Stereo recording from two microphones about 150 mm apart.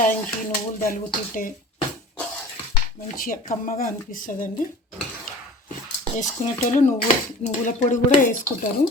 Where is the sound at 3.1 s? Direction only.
70° left (ahead or behind).